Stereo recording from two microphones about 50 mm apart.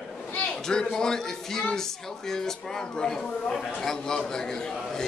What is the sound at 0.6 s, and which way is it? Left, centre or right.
Speech, centre.